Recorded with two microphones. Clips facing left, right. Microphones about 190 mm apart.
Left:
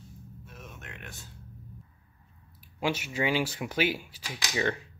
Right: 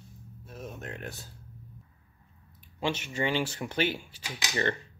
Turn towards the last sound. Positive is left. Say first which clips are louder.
# even
turn(degrees=5)  # may be behind; listen again after turning